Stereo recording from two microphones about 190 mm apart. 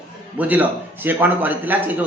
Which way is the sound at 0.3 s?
10° right (ahead or behind).